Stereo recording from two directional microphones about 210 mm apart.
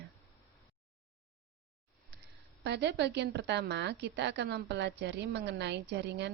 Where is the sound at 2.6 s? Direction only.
55° right (ahead or behind).